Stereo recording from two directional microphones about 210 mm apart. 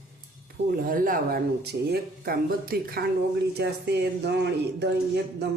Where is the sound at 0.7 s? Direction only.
40° right (ahead or behind).